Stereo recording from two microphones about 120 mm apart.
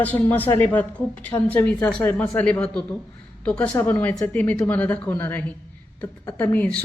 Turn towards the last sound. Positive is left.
turn(degrees=15)  # may be behind; listen again after turning